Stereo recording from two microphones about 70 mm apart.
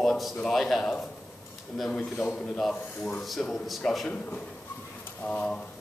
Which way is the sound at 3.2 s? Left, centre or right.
Centre.